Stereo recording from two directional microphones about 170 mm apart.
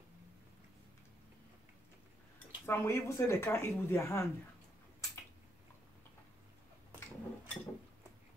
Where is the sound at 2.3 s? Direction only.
15° left (ahead or behind).